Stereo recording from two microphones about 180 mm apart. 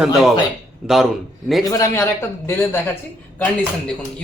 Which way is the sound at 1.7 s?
15° left (ahead or behind).